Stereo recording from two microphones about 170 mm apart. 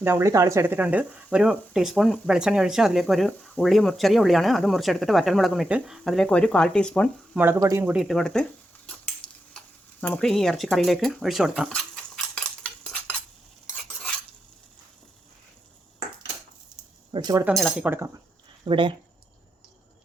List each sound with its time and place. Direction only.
0.0 s speech: 15° right (ahead or behind); by 7.1 s 5° left (ahead or behind)
7.3 s speech: 15° right (ahead or behind); by 8.4 s 5° left (ahead or behind)
10.0 s a sound: 5° left (ahead or behind)
17.1 s speech: 25° right (ahead or behind)
17.5 s speech: centre (ahead or behind)
17.8 s speech: 15° right (ahead or behind)
18.6 s speech: 30° right (ahead or behind)